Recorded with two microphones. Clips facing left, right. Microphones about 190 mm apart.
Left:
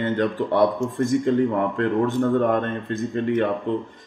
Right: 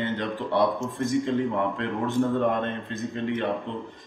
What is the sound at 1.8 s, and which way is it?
Speech, 50° left (ahead or behind).